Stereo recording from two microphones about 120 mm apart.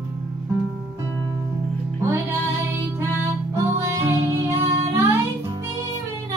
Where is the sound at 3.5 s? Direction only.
20° right (ahead or behind).